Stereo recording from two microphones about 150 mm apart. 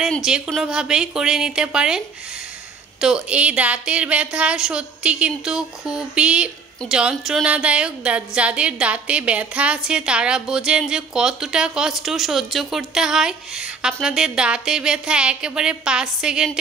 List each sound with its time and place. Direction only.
0.0 s a woman's voice: 5° right (ahead or behind)